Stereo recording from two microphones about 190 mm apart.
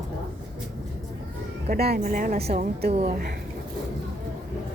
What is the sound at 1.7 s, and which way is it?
Speech, 55° right (ahead or behind).